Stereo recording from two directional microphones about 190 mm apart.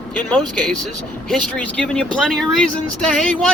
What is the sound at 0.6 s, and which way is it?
Speech, 5° left (ahead or behind).